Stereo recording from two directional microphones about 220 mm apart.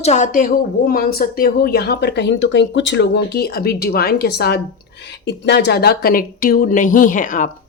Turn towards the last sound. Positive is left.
turn(degrees=35)  # may be behind; listen again after turning